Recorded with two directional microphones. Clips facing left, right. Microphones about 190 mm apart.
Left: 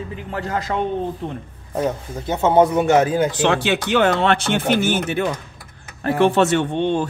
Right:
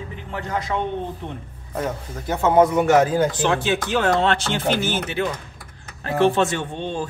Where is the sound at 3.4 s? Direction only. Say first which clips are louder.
Left 2 dB; 75° left (ahead or behind); by 5.2 s 55° left (ahead or behind).